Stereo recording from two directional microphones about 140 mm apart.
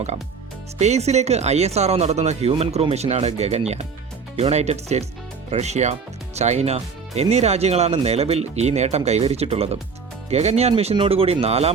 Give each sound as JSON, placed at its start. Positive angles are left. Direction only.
{"t": 0.8, "sound": "speech", "side_deg": -50}